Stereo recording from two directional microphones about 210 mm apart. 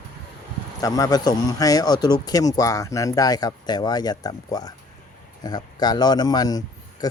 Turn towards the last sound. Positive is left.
turn(degrees=20)  # may be behind; listen again after turning